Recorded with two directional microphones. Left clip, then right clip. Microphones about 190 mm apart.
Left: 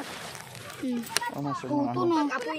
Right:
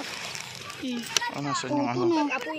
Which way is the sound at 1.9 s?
45° left (ahead or behind).